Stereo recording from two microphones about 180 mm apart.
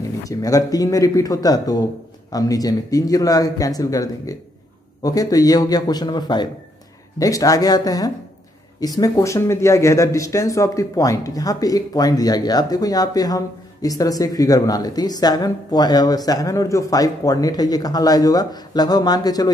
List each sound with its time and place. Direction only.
0.2 s speech: 20° left (ahead or behind)